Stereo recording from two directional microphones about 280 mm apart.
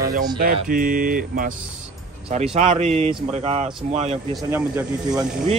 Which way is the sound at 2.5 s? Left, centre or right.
Right.